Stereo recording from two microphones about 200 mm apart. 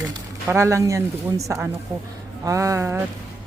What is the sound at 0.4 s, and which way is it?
Speech, 15° right (ahead or behind).